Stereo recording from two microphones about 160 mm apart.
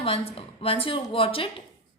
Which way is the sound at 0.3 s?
35° left (ahead or behind).